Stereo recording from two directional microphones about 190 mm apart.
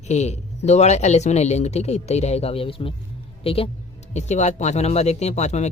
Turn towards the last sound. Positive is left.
turn(degrees=35)  # may be behind; listen again after turning